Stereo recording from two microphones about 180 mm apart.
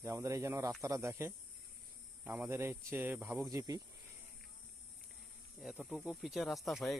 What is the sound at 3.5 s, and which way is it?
Speech, 20° right (ahead or behind).